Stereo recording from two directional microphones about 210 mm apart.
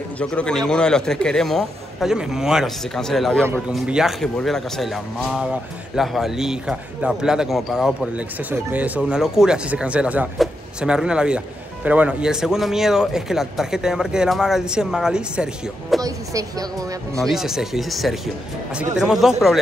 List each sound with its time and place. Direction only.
0.2 s speech: 5° left (ahead or behind)
16.0 s speech: 15° right (ahead or behind)
17.2 s speech: centre (ahead or behind)